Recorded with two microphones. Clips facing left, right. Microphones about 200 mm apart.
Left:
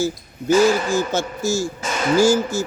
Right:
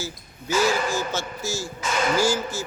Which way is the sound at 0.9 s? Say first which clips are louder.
Left 7 dB; 50° left (ahead or behind).